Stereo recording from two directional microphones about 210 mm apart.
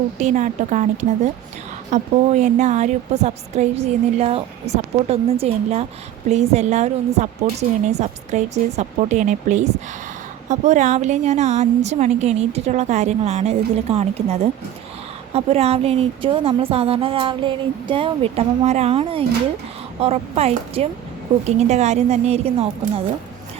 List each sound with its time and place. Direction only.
0.2 s a woman's voice: 35° right (ahead or behind)